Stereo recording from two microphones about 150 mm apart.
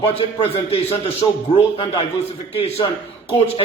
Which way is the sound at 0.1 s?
35° left (ahead or behind).